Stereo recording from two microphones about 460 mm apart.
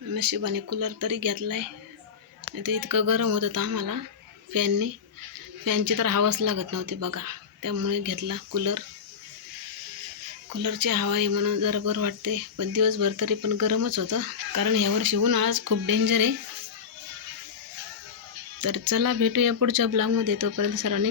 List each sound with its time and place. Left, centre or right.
0.1 s speech: right
10.5 s speech: right
15.6 s speech: right
16.0 s speech: right
18.6 s speech: right